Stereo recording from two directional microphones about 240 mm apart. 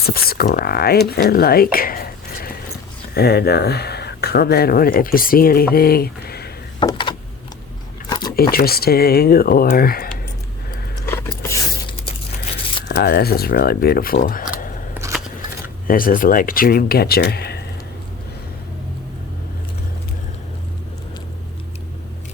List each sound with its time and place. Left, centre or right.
0.0 s speech: left
6.7 s door: centre
8.5 s speech: left
11.0 s a sound: centre
12.9 s speech: left
15.9 s speech: left